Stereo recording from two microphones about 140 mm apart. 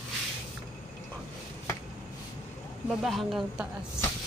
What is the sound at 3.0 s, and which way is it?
Speech, centre (ahead or behind).